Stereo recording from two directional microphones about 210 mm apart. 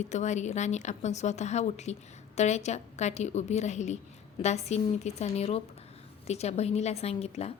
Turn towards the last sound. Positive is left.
turn(degrees=30)  # may be behind; listen again after turning